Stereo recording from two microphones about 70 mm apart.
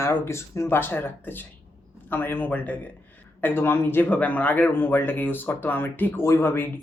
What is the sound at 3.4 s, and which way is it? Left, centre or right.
Speech, left.